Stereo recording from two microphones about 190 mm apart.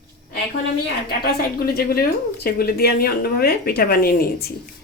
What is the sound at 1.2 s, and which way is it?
A woman's voice, 55° left (ahead or behind).